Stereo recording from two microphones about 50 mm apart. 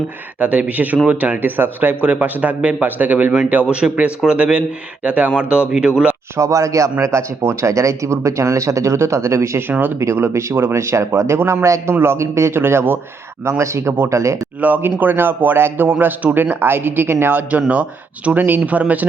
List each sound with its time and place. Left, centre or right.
0.3 s speech: right
2.0 s speech: right
6.3 s speech: right
7.0 s speech: right
9.6 s speech: right
10.0 s speech: right
11.3 s a man's voice: right
12.5 s speech: right
13.4 s speech: right
14.1 s speech: right
14.8 s speech: right
18.3 s speech: right